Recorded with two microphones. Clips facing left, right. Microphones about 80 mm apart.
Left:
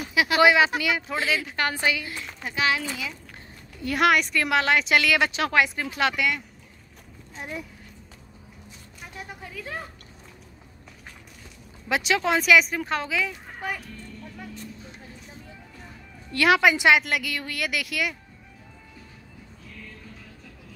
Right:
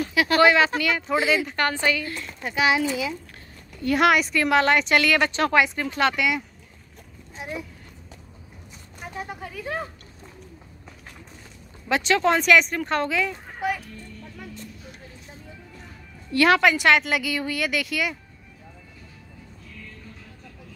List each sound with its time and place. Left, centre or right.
0.0 s speech: centre
1.1 s a woman's voice: centre
1.7 s speech: centre
2.6 s speech: centre
3.8 s a woman's voice: centre
7.4 s a woman's voice: centre
11.9 s a woman's voice: centre
16.3 s a woman's voice: centre
17.0 s a woman's voice: centre